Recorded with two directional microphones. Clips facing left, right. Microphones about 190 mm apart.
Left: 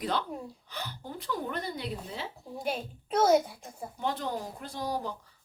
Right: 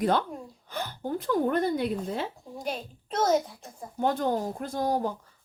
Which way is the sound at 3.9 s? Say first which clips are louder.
Right 7 dB; 50° right (ahead or behind).